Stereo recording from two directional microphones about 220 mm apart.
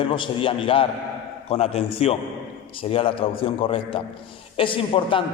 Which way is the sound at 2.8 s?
25° left (ahead or behind).